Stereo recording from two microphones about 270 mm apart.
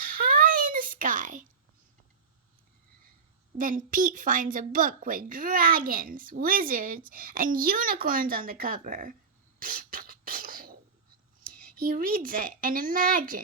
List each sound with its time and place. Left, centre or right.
0.0 s a sound: right
3.6 s a woman's voice: right
9.6 s beatboxing: right
11.8 s a woman's voice: right